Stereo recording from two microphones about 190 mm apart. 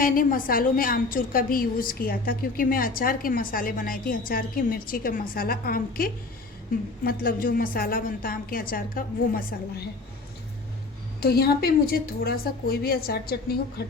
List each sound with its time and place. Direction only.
0.0 s a woman's voice: 45° left (ahead or behind)
11.2 s a woman's voice: 55° left (ahead or behind)